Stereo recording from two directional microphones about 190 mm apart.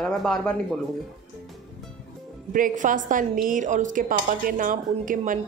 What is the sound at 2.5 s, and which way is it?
A woman's voice, 45° right (ahead or behind).